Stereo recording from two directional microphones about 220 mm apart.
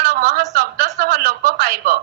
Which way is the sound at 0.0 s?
45° right (ahead or behind).